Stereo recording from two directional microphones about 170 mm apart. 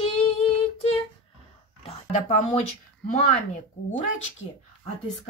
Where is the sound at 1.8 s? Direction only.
45° left (ahead or behind).